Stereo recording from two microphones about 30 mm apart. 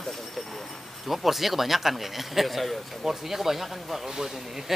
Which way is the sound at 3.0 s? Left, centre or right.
Centre.